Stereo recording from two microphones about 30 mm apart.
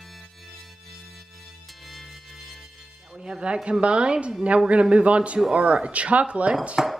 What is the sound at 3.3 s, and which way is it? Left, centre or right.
A woman's voice, right.